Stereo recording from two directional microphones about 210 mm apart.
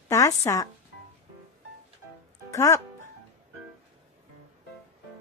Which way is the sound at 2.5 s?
15° left (ahead or behind).